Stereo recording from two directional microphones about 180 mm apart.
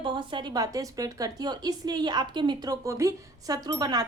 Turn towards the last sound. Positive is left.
turn(degrees=-20)  # may be behind; listen again after turning